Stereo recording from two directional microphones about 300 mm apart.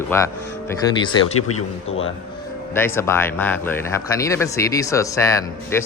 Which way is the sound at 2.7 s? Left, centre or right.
Centre.